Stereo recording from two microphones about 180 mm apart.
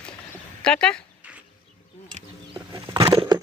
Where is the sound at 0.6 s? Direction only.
5° left (ahead or behind).